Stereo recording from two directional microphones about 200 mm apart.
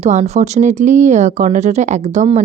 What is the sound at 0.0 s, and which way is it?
Speech, 35° right (ahead or behind).